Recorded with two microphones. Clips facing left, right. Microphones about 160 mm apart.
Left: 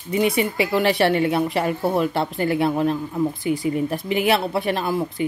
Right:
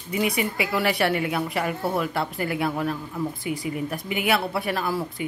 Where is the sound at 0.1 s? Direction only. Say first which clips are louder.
Left 5 dB; 30° left (ahead or behind).